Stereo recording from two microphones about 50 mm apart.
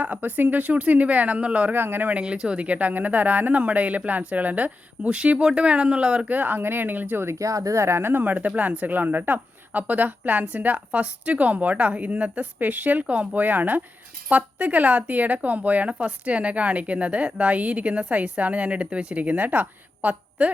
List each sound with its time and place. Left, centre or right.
0.0 s speech: right
1.7 s speech: right
2.2 s speech: centre
6.2 s speech: right
7.3 s speech: right
8.2 s speech: right